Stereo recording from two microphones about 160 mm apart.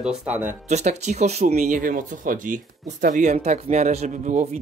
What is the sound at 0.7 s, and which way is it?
Speech, 45° right (ahead or behind).